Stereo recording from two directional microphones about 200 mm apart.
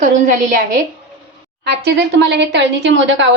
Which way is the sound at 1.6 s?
60° right (ahead or behind).